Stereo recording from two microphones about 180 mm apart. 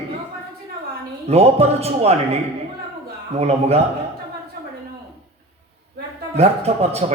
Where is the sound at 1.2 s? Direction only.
35° right (ahead or behind).